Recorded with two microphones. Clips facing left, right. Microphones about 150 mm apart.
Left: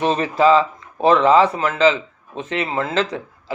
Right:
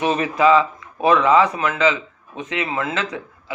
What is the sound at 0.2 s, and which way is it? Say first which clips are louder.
A man's voice: left 1 dB; 30° left (ahead or behind).